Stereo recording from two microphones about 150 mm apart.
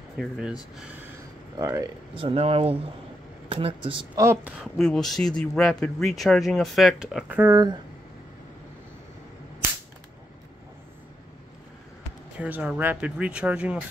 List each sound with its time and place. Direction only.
0.2 s speech: 5° right (ahead or behind)
1.6 s speech: 20° right (ahead or behind)
2.1 s speech: 40° right (ahead or behind)
4.2 s speech: 15° right (ahead or behind)
4.6 s speech: 5° left (ahead or behind)
12.4 s speech: 10° right (ahead or behind)